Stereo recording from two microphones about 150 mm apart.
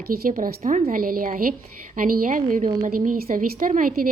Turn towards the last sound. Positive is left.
turn(degrees=-65)  # may be behind; listen again after turning